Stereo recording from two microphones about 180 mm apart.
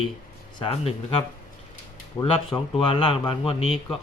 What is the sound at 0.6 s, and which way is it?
Speech, 35° left (ahead or behind).